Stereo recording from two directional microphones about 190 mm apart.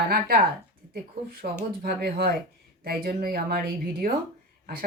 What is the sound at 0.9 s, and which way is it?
Speech, 50° right (ahead or behind).